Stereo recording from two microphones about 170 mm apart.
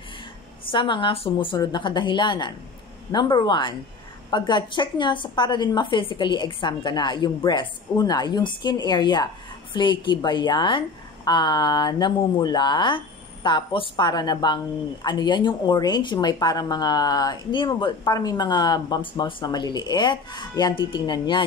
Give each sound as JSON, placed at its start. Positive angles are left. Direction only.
{"t": 0.7, "sound": "speech", "side_deg": 30}